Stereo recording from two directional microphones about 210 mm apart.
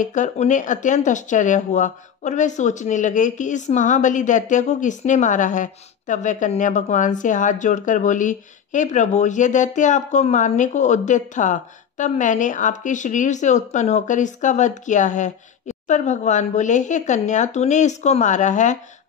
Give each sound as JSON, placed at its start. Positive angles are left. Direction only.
{"t": 0.0, "sound": "speech", "side_deg": 35}